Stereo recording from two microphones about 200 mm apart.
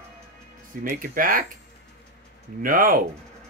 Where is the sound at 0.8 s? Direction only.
45° right (ahead or behind).